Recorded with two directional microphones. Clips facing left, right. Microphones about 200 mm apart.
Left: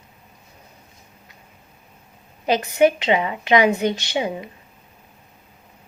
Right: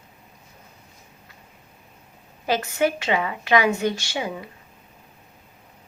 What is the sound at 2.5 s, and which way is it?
A woman's voice, 20° left (ahead or behind).